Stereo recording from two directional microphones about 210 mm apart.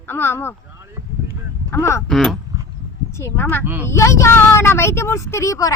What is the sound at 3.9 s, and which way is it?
Speech, 15° left (ahead or behind).